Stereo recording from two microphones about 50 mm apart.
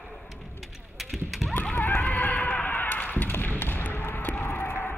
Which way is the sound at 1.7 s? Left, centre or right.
Left.